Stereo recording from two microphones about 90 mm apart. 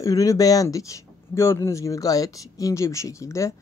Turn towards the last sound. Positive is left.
turn(degrees=35)  # may be behind; listen again after turning